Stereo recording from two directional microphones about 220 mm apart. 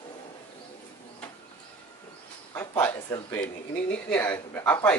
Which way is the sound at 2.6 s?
10° left (ahead or behind).